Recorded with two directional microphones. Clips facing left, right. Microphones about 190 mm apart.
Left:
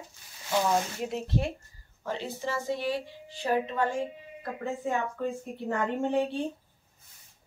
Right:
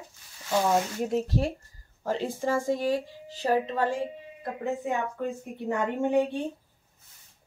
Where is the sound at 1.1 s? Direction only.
40° right (ahead or behind).